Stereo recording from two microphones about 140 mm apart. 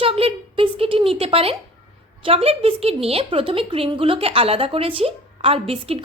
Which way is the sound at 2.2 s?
45° right (ahead or behind).